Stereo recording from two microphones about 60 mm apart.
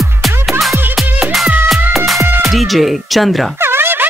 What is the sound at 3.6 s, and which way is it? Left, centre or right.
Music, right.